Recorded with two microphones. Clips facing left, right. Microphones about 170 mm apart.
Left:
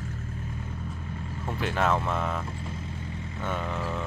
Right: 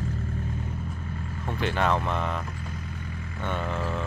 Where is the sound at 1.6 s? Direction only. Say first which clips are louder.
Right 1 dB; centre (ahead or behind).